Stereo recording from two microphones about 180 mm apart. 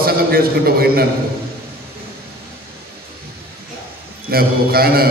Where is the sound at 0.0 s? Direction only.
55° right (ahead or behind).